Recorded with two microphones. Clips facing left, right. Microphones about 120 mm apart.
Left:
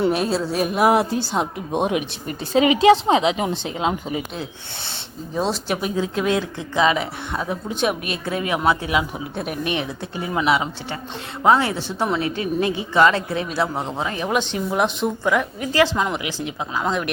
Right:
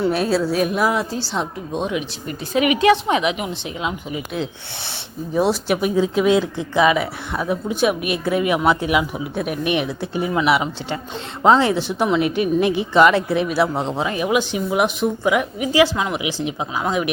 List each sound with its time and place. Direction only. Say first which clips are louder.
0.3 s speech: right 3 dB; centre (ahead or behind)
0.8 s a woman's voice: left 3 dB; 60° left (ahead or behind)
2.2 s speech: left 1 dB; 30° left (ahead or behind)
5.3 s speech: right 4 dB; 10° right (ahead or behind)
9.3 s speech: right 4 dB; 5° right (ahead or behind)
11.4 s speech: right 3 dB; 20° right (ahead or behind); by 16.2 s 5° right (ahead or behind)
16.2 s speech: right 4 dB; 15° right (ahead or behind)